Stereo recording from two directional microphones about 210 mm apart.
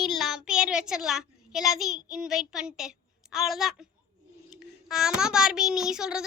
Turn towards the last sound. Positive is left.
turn(degrees=-5)  # may be behind; listen again after turning